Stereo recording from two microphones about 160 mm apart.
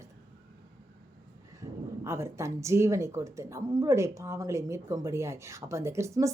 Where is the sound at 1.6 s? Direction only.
20° right (ahead or behind).